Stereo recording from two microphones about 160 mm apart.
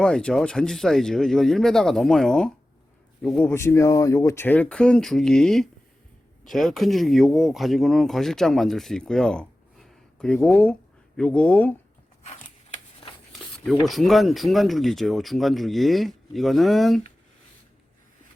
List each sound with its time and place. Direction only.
0.0 s a man's voice: 5° left (ahead or behind)
3.5 s speech: 15° left (ahead or behind)
12.2 s a sound: 45° left (ahead or behind)
13.8 s speech: centre (ahead or behind)